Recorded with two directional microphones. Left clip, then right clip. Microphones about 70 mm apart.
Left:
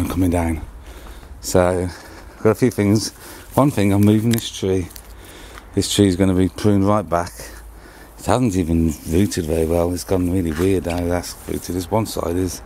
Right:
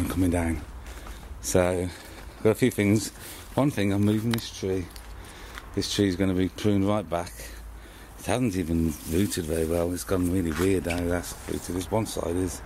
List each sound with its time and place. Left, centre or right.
0.0 s speech: left
3.3 s speech: left
5.8 s speech: left
11.4 s speech: left